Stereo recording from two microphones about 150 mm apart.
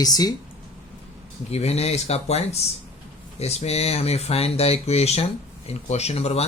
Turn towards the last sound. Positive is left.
turn(degrees=45)  # may be behind; listen again after turning